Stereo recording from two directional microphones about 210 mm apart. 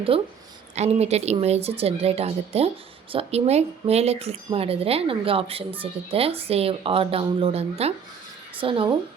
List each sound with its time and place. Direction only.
0.1 s speech: 25° right (ahead or behind)